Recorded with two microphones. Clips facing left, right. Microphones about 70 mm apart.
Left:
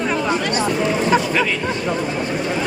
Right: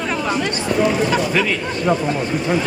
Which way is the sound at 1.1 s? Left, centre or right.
Centre.